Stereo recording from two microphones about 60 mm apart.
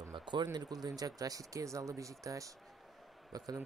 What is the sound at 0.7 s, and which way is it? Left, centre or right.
Speech, right.